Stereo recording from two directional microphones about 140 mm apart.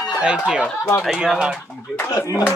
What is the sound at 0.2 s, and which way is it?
Speech, 5° right (ahead or behind).